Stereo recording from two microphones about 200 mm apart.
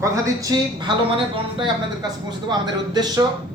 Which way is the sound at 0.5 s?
20° right (ahead or behind).